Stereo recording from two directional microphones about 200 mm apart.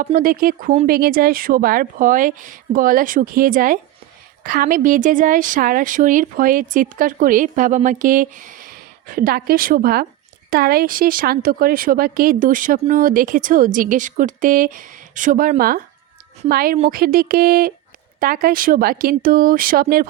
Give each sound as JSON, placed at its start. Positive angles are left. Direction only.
{"t": 0.0, "sound": "a woman's voice", "side_deg": -45}